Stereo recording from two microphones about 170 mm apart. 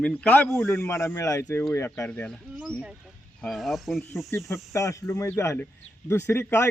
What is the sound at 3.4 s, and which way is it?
Speech, centre (ahead or behind).